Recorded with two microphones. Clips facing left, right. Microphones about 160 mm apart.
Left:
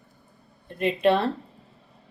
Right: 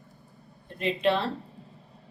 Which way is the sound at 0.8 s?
55° left (ahead or behind).